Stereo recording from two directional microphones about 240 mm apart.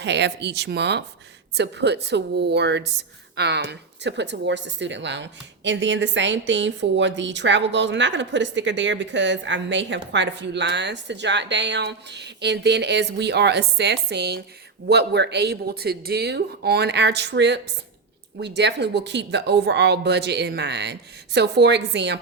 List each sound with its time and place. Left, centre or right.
0.0 s speech: right